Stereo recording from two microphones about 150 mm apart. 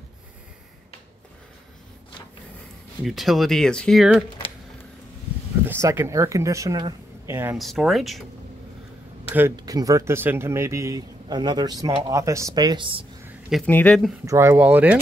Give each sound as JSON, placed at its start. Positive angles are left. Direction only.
{"t": 3.0, "sound": "speech", "side_deg": 0}
{"t": 5.7, "sound": "speech", "side_deg": -15}
{"t": 7.5, "sound": "speech", "side_deg": 0}
{"t": 9.6, "sound": "speech", "side_deg": -25}
{"t": 13.7, "sound": "speech", "side_deg": 10}
{"t": 14.2, "sound": "speech", "side_deg": -20}